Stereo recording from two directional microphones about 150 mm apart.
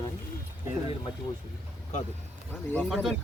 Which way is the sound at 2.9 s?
Centre (ahead or behind).